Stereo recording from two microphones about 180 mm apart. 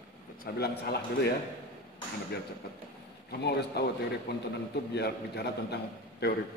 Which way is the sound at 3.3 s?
65° left (ahead or behind).